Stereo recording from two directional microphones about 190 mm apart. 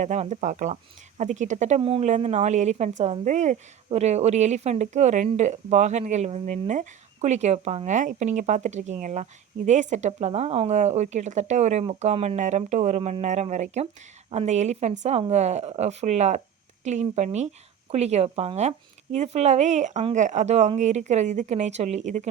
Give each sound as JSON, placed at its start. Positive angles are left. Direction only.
{"t": 0.0, "sound": "speech", "side_deg": -40}